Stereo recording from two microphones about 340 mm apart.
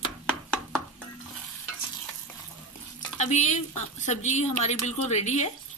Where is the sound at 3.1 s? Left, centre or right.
Left.